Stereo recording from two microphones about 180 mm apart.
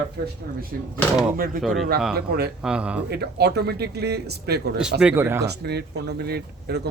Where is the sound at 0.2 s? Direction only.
65° right (ahead or behind).